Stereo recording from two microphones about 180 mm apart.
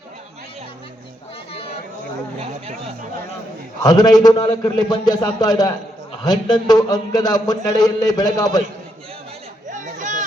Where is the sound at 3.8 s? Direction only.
20° left (ahead or behind).